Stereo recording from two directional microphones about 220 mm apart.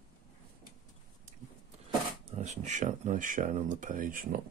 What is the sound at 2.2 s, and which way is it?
Speech, 30° right (ahead or behind).